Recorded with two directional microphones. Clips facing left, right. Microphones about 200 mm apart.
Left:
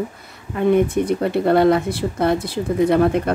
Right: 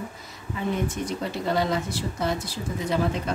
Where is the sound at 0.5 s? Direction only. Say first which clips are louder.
Left 11 dB; 60° left (ahead or behind).